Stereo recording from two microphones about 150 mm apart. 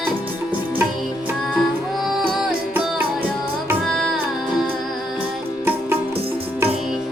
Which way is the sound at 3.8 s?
Centre (ahead or behind).